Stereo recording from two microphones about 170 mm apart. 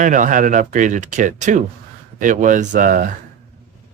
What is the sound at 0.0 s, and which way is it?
A man's voice, 50° right (ahead or behind).